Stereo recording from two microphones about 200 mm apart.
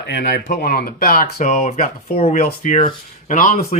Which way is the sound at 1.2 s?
35° left (ahead or behind).